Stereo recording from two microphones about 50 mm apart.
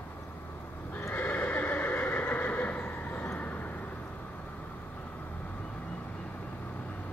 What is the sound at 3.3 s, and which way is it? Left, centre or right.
Vehicle, left.